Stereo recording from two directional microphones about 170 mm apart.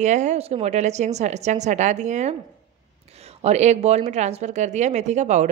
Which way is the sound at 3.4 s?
40° right (ahead or behind).